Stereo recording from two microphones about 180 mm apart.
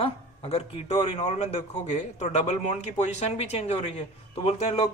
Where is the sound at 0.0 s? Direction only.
35° left (ahead or behind).